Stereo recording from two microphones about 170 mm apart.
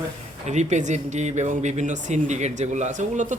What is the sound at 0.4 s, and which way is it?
Speech, 45° right (ahead or behind).